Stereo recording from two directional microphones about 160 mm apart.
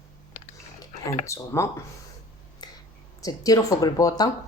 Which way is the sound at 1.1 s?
20° left (ahead or behind).